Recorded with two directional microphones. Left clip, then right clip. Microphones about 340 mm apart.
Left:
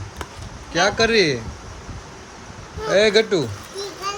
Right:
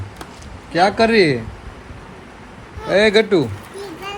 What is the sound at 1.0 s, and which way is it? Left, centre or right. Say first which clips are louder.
Speech: right 3 dB; centre.